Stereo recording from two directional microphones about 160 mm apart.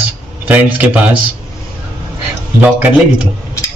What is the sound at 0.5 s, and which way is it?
Speech, 10° right (ahead or behind).